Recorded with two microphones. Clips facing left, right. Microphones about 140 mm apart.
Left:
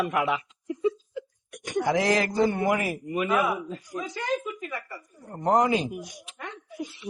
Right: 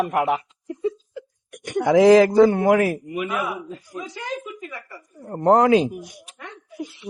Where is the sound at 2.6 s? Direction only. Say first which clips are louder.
Right 8 dB; 90° right.